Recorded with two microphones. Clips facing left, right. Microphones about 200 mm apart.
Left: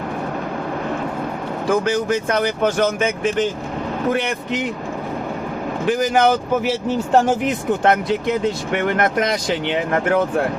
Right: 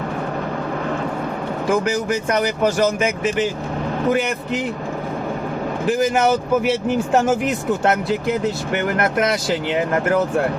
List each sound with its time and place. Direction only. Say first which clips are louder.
1.7 s speech: left 2 dB; 10° right (ahead or behind)
6.6 s speech: right 1 dB; 5° right (ahead or behind)